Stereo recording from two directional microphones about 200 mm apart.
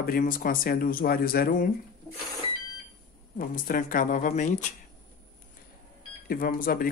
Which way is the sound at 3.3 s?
45° left (ahead or behind).